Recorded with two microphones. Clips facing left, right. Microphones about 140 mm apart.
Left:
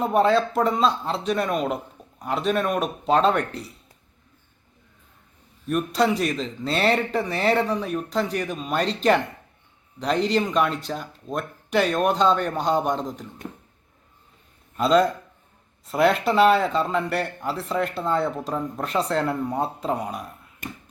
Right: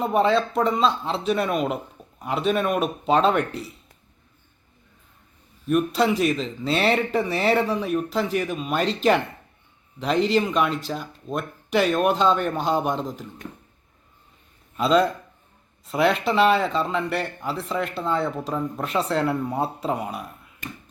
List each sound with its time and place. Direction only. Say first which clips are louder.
0.0 s speech: left 1 dB; centre (ahead or behind)
5.6 s speech: right 1 dB; centre (ahead or behind)
13.4 s a sound: left 4 dB; 40° left (ahead or behind)
14.8 s speech: left 1 dB; centre (ahead or behind)